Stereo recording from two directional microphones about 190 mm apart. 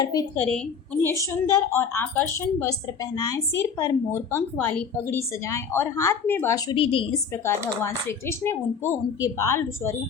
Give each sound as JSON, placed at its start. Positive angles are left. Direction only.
{"t": 0.0, "sound": "a woman's voice", "side_deg": 20}
{"t": 7.8, "sound": "a woman's voice", "side_deg": 15}